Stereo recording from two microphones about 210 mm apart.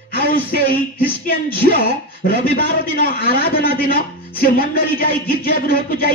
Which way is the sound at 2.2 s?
45° left (ahead or behind).